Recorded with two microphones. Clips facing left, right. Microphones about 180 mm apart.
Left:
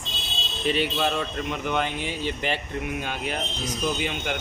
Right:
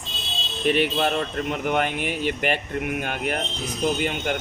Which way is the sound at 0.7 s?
55° right (ahead or behind).